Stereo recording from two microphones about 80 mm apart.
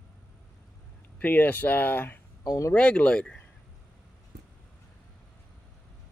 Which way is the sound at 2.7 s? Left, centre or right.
Centre.